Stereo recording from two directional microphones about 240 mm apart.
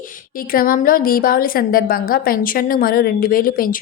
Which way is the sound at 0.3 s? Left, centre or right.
Left.